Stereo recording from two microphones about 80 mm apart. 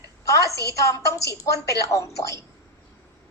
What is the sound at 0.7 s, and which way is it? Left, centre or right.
A woman's voice, left.